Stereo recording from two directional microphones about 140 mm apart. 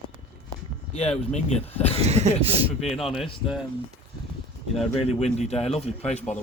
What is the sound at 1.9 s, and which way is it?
Speech, 50° right (ahead or behind).